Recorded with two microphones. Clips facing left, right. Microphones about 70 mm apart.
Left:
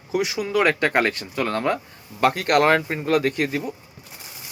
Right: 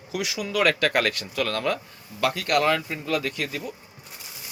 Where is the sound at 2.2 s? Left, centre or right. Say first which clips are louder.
Left 4 dB; left.